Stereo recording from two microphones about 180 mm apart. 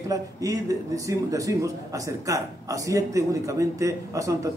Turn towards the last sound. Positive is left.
turn(degrees=-20)  # may be behind; listen again after turning